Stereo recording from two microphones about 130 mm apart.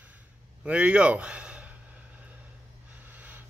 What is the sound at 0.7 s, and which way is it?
Speech, 10° right (ahead or behind).